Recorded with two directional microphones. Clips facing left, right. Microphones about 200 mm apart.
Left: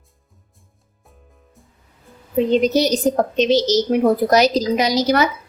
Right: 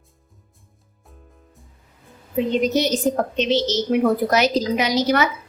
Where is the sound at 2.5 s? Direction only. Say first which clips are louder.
Left 3 dB; 35° left (ahead or behind).